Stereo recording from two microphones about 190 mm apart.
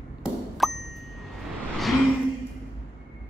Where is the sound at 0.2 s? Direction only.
Centre (ahead or behind).